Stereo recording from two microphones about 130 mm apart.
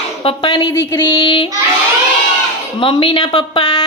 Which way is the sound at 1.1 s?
35° left (ahead or behind).